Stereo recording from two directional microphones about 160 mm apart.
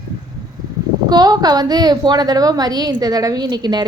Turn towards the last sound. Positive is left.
turn(degrees=-25)  # may be behind; listen again after turning